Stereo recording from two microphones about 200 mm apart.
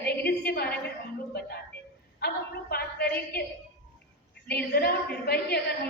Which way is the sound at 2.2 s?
55° left (ahead or behind).